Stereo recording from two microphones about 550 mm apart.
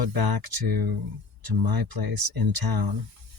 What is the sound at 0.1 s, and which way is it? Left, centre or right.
Speech, right.